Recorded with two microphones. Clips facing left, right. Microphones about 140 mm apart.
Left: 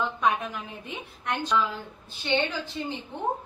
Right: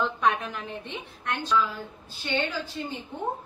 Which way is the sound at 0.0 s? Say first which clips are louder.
Right 1 dB; centre (ahead or behind).